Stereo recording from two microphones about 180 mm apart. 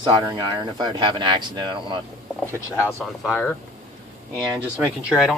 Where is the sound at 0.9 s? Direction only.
25° right (ahead or behind).